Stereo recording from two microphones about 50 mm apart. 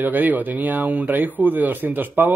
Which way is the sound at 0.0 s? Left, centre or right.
Right.